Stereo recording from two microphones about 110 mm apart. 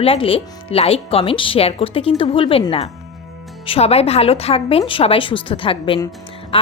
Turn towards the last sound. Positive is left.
turn(degrees=55)  # may be behind; listen again after turning